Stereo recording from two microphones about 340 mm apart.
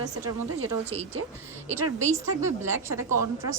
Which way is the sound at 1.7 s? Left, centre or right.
Centre.